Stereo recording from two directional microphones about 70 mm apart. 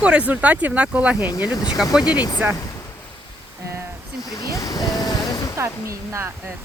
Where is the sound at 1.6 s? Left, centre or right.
Centre.